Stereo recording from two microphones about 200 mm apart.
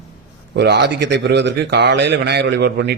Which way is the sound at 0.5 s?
55° right (ahead or behind).